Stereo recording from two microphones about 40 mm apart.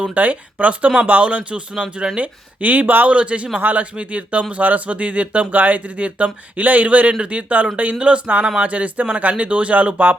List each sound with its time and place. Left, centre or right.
0.1 s speech: right
3.2 s speech: right
5.5 s speech: right